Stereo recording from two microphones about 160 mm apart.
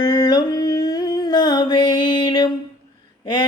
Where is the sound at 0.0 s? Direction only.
25° left (ahead or behind).